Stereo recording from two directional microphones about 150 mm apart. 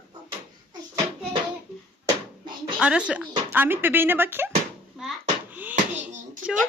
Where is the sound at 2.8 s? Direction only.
5° right (ahead or behind).